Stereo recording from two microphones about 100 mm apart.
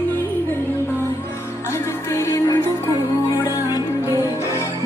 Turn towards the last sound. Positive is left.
turn(degrees=35)  # may be behind; listen again after turning